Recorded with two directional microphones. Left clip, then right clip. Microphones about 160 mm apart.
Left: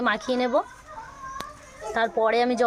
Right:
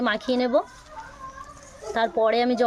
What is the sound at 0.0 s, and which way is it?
Speech, 25° right (ahead or behind).